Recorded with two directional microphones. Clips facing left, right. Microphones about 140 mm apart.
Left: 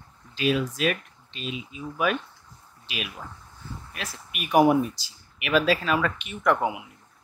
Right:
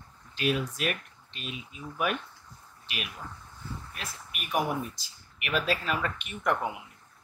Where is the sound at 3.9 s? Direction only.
90° left.